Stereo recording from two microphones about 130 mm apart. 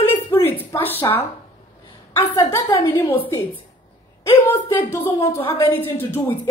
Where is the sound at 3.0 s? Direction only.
45° left (ahead or behind).